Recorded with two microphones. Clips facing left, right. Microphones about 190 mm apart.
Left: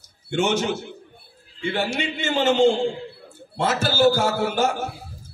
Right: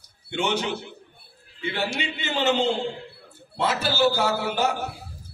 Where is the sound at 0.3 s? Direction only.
45° left (ahead or behind).